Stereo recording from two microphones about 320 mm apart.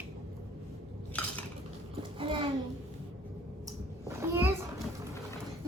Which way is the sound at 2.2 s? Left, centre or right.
Centre.